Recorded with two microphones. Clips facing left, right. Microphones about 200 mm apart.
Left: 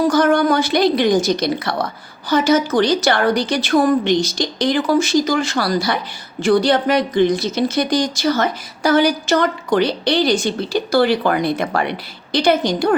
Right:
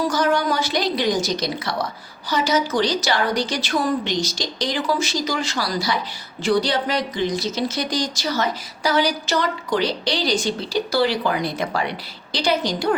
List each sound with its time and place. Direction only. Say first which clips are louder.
0.1 s a woman's voice: left 6 dB; 55° left (ahead or behind)